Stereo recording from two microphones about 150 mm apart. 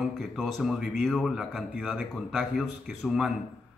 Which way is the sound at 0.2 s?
Centre (ahead or behind).